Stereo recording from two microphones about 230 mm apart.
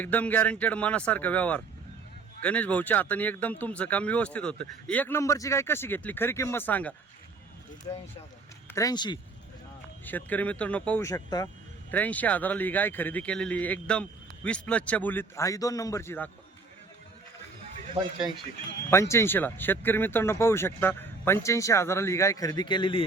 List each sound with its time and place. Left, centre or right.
0.0 s a man's voice: centre
7.9 s speech: left
10.1 s a man's voice: centre
18.9 s a man's voice: centre